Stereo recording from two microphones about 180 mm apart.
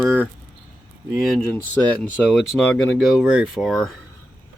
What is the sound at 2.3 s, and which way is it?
Speech, centre (ahead or behind).